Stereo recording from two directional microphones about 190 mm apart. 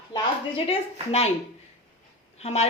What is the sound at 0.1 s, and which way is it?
Speech, 30° left (ahead or behind).